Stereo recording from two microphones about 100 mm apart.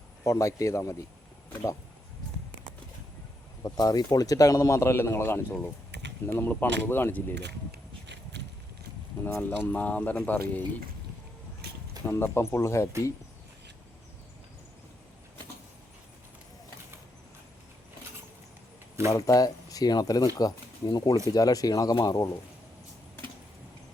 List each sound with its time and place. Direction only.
0.3 s speech: 30° left (ahead or behind)
3.6 s speech: 40° left (ahead or behind); by 7.3 s 20° left (ahead or behind)
9.2 s speech: 20° left (ahead or behind)
12.0 s speech: 25° left (ahead or behind)
19.1 s speech: 35° left (ahead or behind)